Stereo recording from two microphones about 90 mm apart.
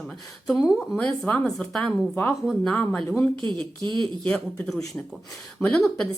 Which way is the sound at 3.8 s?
60° right (ahead or behind).